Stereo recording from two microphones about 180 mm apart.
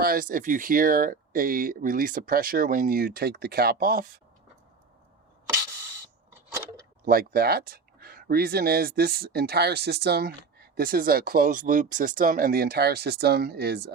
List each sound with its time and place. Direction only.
0.0 s speech: 55° right (ahead or behind)
7.0 s speech: 55° right (ahead or behind)